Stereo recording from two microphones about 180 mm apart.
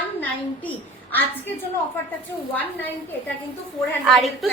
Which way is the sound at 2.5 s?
10° left (ahead or behind).